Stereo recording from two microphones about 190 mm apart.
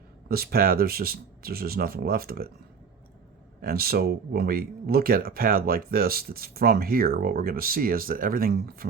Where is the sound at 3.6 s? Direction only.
55° right (ahead or behind).